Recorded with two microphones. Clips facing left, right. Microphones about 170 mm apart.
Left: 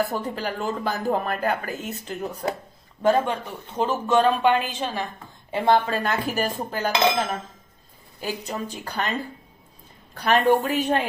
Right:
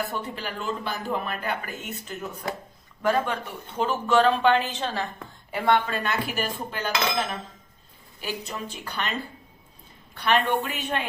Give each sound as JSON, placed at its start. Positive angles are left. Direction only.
{"t": 0.1, "sound": "speech", "side_deg": 40}
{"t": 3.0, "sound": "a woman's voice", "side_deg": 25}
{"t": 5.5, "sound": "speech", "side_deg": 25}
{"t": 10.2, "sound": "speech", "side_deg": 40}